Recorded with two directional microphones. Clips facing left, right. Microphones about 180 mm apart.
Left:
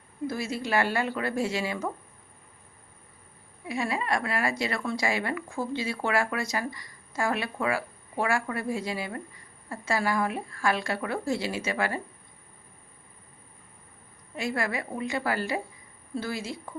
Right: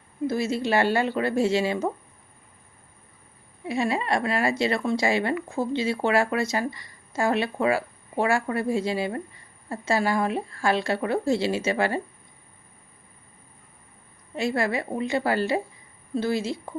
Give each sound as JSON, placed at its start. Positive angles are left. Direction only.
{"t": 0.3, "sound": "speech", "side_deg": -25}
{"t": 3.7, "sound": "speech", "side_deg": -25}
{"t": 14.3, "sound": "speech", "side_deg": -25}